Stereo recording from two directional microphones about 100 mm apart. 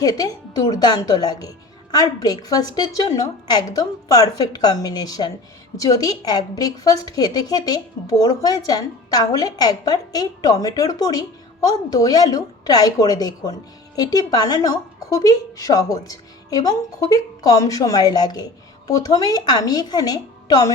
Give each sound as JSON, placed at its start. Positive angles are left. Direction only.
{"t": 0.0, "sound": "a woman's voice", "side_deg": 40}